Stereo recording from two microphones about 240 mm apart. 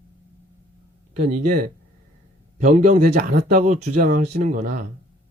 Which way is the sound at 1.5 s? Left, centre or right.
Right.